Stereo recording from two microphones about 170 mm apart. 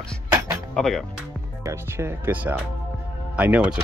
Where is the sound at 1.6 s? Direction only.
15° right (ahead or behind).